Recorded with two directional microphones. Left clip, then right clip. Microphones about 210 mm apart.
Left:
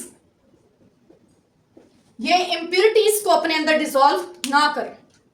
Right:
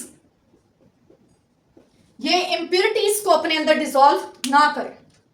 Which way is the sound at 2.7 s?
30° left (ahead or behind).